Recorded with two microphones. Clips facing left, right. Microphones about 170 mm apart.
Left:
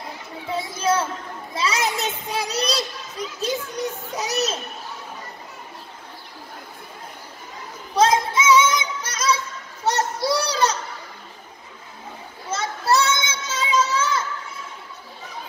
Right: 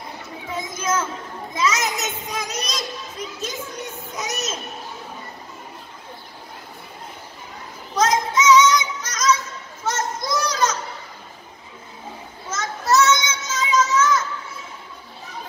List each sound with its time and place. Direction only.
0.5 s a sound: 35° left (ahead or behind)
1.5 s children playing: 35° left (ahead or behind)
7.9 s child singing: 30° left (ahead or behind)
9.0 s music: 30° left (ahead or behind)
9.8 s children playing: 35° left (ahead or behind)
12.4 s child singing: 30° left (ahead or behind)